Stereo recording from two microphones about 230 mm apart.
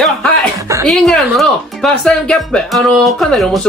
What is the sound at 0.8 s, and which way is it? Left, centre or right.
Speech, centre.